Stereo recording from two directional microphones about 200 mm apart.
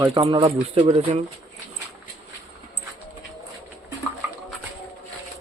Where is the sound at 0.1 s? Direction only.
25° right (ahead or behind).